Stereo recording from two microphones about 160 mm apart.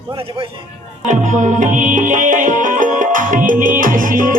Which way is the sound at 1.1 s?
50° right (ahead or behind).